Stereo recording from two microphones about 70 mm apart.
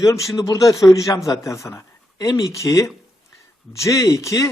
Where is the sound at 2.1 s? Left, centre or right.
Left.